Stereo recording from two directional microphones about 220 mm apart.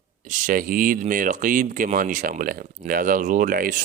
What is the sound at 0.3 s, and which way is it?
Speech, 35° right (ahead or behind).